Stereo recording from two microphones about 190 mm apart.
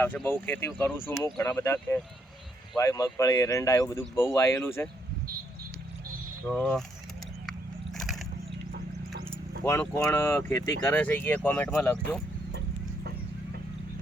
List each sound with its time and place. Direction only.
0.0 s speech: 10° left (ahead or behind)
6.5 s speech: 5° left (ahead or behind)
7.4 s a sound: centre (ahead or behind)
9.6 s speech: 15° left (ahead or behind)